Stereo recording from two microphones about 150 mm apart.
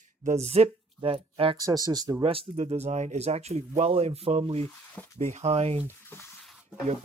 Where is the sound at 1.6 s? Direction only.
25° right (ahead or behind).